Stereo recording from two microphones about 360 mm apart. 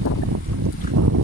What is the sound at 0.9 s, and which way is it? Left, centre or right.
Boat, right.